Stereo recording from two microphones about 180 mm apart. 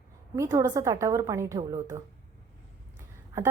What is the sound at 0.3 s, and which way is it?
A woman's voice, 20° right (ahead or behind).